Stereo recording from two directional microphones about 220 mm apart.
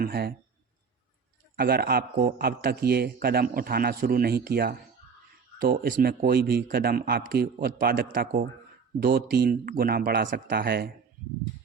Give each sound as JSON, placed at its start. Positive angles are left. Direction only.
{"t": 0.0, "sound": "a man's voice", "side_deg": -45}
{"t": 1.5, "sound": "a man's voice", "side_deg": -45}